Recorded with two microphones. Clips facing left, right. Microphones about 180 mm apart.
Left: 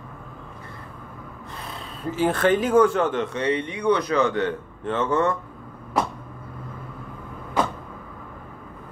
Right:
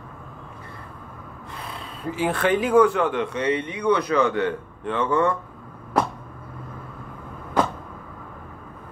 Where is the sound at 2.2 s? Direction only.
45° left (ahead or behind).